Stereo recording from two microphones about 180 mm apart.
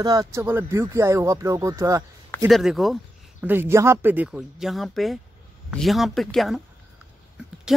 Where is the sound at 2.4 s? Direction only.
Centre (ahead or behind).